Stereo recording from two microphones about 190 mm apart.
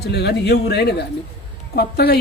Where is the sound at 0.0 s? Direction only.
60° left (ahead or behind).